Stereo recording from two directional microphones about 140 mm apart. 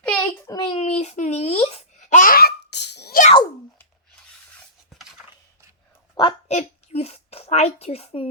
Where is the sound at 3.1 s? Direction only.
90° left.